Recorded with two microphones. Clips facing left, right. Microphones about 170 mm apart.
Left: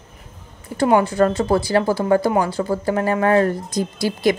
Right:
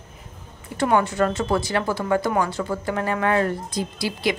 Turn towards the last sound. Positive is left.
turn(degrees=45)  # may be behind; listen again after turning